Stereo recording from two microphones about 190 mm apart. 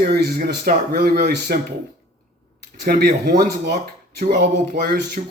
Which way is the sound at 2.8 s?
55° right (ahead or behind).